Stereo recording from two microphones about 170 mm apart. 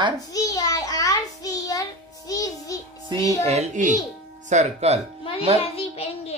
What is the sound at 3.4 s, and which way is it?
A child's voice, 40° right (ahead or behind).